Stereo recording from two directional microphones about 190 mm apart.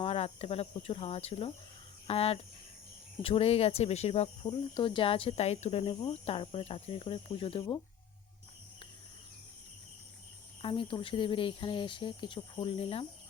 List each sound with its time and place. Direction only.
0.0 s speech: 30° left (ahead or behind)
10.6 s speech: 30° left (ahead or behind)